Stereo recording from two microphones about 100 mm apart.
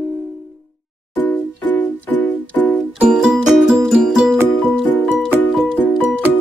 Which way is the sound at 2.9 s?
5° right (ahead or behind).